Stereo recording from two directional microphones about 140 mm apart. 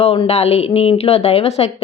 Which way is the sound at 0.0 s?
45° left (ahead or behind).